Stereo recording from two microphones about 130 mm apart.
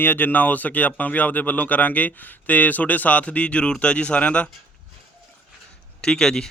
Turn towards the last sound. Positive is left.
turn(degrees=5)  # may be behind; listen again after turning